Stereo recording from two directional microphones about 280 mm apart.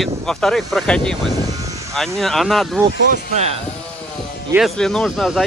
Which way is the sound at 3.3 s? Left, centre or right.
Right.